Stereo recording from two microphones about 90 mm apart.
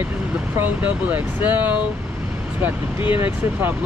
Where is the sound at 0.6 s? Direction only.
20° right (ahead or behind).